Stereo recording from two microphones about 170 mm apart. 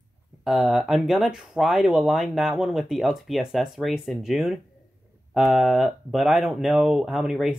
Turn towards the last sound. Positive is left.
turn(degrees=-5)  # may be behind; listen again after turning